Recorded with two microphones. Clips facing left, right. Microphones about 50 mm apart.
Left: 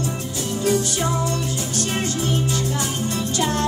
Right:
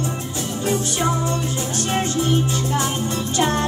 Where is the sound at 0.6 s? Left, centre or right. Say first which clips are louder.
Left 1 dB; right.